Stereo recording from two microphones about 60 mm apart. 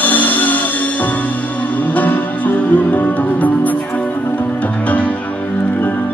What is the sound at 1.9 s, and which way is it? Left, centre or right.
Music, left.